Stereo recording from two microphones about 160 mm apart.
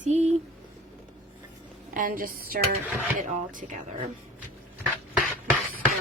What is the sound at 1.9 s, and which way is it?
Speech, 60° right (ahead or behind).